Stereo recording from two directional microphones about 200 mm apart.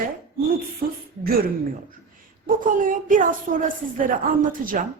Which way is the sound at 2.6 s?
40° right (ahead or behind).